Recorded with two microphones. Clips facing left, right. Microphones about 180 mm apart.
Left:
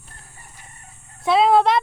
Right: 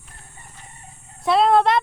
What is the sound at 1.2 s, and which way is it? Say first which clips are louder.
Speech: left 1 dB; centre (ahead or behind).